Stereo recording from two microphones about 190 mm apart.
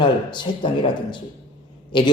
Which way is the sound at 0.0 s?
25° left (ahead or behind).